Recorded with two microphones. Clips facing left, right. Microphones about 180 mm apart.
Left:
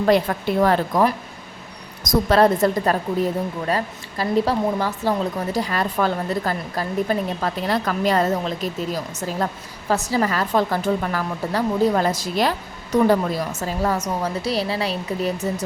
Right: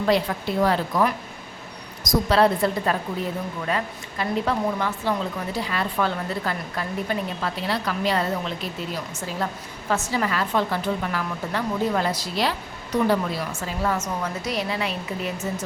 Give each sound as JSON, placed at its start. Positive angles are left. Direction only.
{"t": 0.0, "sound": "a woman's voice", "side_deg": 50}
{"t": 2.0, "sound": "a woman's voice", "side_deg": 45}